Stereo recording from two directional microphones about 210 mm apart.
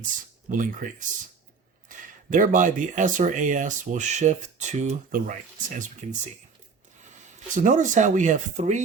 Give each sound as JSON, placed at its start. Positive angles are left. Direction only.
{"t": 0.5, "sound": "speech", "side_deg": -40}
{"t": 7.3, "sound": "speech", "side_deg": -35}